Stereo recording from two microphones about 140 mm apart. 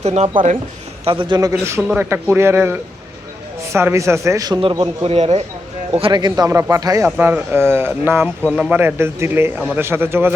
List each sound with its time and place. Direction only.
0.0 s speech: 55° right (ahead or behind)
1.0 s a man's voice: 40° right (ahead or behind)
1.6 s a man's voice: 15° right (ahead or behind); by 5.1 s 35° right (ahead or behind)
5.1 s speech: 50° right (ahead or behind)
5.9 s a man's voice: 35° right (ahead or behind); by 10.3 s 15° right (ahead or behind)